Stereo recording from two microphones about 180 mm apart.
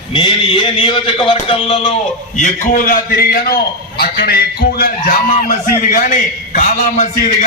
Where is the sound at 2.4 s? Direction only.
50° left (ahead or behind).